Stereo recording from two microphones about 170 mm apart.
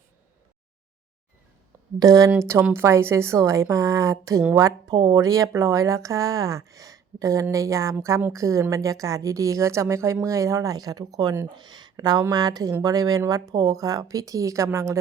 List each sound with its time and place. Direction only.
2.0 s a woman's voice: 20° right (ahead or behind)